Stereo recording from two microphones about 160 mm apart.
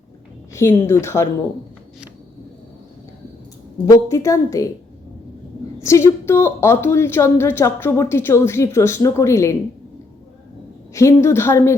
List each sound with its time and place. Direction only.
0.5 s a woman's voice: 15° left (ahead or behind)
3.8 s a woman's voice: 20° left (ahead or behind)
5.8 s a woman's voice: 15° left (ahead or behind)
10.9 s a woman's voice: 20° left (ahead or behind)